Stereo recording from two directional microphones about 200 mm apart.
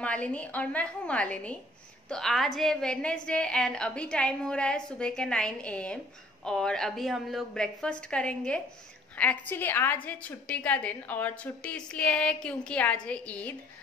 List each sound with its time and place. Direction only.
0.0 s a woman's voice: 5° left (ahead or behind)